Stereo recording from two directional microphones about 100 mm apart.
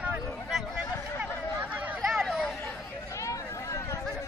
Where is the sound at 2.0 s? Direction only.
5° right (ahead or behind).